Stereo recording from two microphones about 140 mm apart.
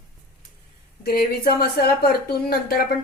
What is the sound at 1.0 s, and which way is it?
Speech, 90° left.